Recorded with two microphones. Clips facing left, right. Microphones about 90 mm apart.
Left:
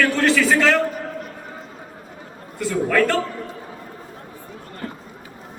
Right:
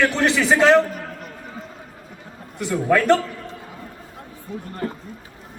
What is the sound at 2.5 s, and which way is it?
Speech, 20° right (ahead or behind).